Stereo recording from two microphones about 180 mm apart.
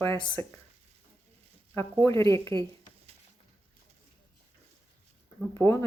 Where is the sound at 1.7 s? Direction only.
15° left (ahead or behind).